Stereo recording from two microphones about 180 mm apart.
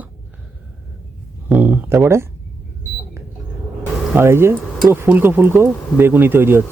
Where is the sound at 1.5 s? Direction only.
10° right (ahead or behind).